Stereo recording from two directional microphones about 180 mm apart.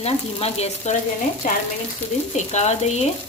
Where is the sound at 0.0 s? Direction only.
35° left (ahead or behind).